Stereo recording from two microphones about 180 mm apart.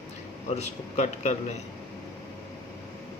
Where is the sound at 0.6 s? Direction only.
40° left (ahead or behind).